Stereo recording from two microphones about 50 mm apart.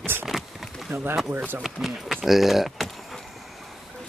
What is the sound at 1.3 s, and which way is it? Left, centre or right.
Speech, right.